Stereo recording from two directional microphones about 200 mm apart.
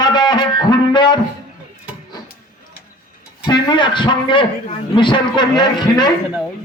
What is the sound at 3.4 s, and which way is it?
A man's voice, 20° left (ahead or behind).